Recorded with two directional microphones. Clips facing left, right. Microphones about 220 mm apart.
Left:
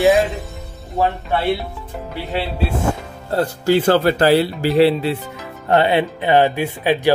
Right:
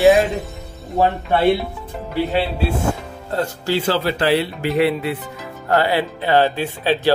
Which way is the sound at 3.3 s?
45° left (ahead or behind).